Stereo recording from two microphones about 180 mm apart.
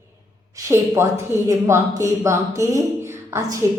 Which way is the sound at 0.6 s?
15° right (ahead or behind).